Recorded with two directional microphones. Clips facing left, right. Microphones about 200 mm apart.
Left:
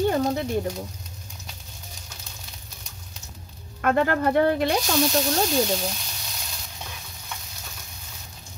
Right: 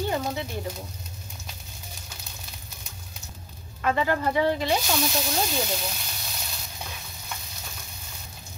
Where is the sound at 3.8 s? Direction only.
55° left (ahead or behind).